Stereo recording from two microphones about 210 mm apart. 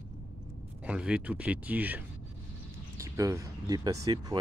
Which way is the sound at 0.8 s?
5° right (ahead or behind).